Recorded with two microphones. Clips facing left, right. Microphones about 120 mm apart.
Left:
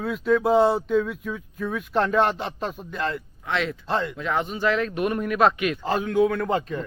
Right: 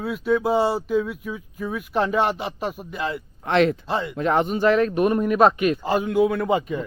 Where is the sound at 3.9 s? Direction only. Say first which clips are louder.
Even; 5° right (ahead or behind).